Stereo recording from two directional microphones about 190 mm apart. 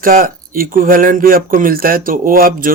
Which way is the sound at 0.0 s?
50° right (ahead or behind).